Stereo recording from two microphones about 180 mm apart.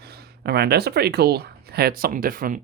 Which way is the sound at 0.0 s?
60° right (ahead or behind).